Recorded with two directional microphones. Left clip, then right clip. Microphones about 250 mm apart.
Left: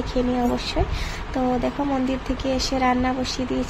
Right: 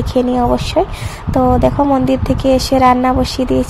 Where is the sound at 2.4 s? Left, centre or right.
Right.